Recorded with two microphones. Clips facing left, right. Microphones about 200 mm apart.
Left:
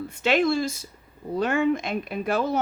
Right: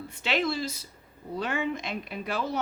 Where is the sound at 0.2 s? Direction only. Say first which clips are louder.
Left 7 dB; 50° left (ahead or behind).